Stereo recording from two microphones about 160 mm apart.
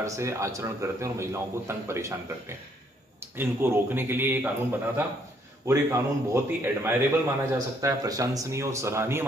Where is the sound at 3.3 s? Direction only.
15° right (ahead or behind).